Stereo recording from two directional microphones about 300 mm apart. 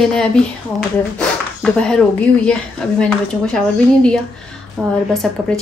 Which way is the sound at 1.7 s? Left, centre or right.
Centre.